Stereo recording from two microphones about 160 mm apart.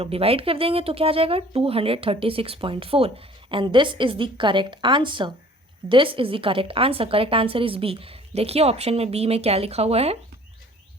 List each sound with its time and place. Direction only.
0.0 s speech: 35° right (ahead or behind)